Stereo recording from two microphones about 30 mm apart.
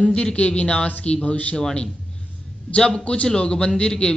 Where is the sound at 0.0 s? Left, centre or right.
Left.